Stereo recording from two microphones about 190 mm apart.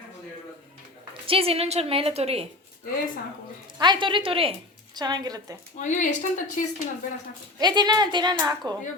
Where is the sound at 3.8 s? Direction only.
25° right (ahead or behind).